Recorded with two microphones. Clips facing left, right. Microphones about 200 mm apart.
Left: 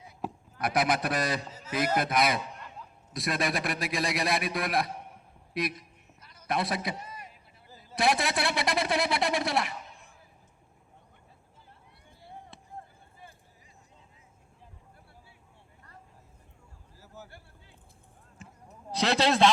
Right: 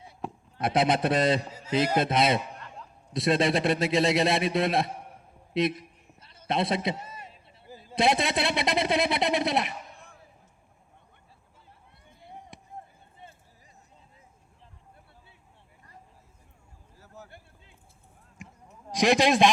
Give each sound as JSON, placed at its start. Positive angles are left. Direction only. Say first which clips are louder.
{"t": 0.5, "sound": "a man's voice", "louder": "right 3 dB", "side_deg": -25}
{"t": 1.5, "sound": "music", "louder": "right 2 dB", "side_deg": -10}
{"t": 2.0, "sound": "a man's voice", "louder": "right 3 dB", "side_deg": -25}
{"t": 5.5, "sound": "a sound", "louder": "right 6 dB", "side_deg": -25}
{"t": 7.9, "sound": "a man's voice", "louder": "right 3 dB", "side_deg": -20}
{"t": 12.2, "sound": "chop", "louder": "right 1 dB", "side_deg": -20}
{"t": 17.2, "sound": "a sound", "louder": "right 1 dB", "side_deg": -20}
{"t": 18.9, "sound": "a man's voice", "louder": "right 4 dB", "side_deg": -15}